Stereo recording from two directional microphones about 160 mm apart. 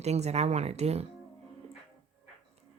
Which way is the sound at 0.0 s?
45° right (ahead or behind).